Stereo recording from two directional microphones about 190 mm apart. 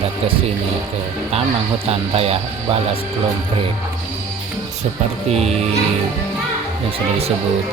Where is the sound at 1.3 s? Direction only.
30° right (ahead or behind).